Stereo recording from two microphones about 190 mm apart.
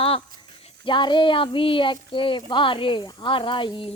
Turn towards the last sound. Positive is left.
turn(degrees=25)  # may be behind; listen again after turning